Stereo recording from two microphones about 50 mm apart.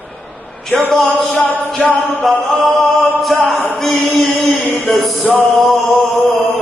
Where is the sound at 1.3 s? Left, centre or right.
Left.